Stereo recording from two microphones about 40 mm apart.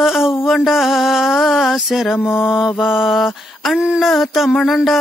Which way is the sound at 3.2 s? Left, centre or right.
Centre.